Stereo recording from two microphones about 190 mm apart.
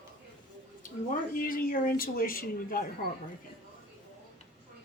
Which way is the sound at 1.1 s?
50° left (ahead or behind).